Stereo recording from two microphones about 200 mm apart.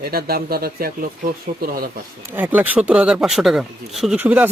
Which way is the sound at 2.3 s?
10° right (ahead or behind).